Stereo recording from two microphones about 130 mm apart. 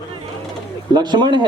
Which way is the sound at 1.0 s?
35° right (ahead or behind).